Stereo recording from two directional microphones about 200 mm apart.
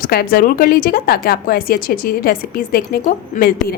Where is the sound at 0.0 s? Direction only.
50° left (ahead or behind).